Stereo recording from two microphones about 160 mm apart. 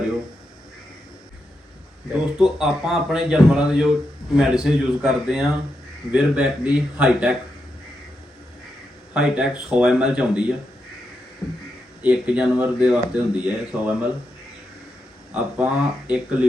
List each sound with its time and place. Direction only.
2.4 s speech: 5° right (ahead or behind)
9.1 s speech: 5° right (ahead or behind)
11.4 s speech: 25° left (ahead or behind)
12.0 s speech: 10° right (ahead or behind)
15.3 s speech: 10° right (ahead or behind)